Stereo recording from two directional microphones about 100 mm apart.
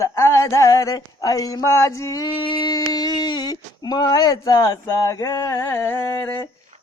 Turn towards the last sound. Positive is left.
turn(degrees=25)  # may be behind; listen again after turning